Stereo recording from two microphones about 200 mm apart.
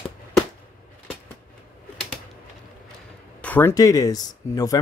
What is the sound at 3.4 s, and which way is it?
Speech, 10° left (ahead or behind).